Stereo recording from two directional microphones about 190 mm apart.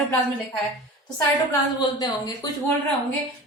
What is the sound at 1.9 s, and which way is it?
Speech, 20° left (ahead or behind).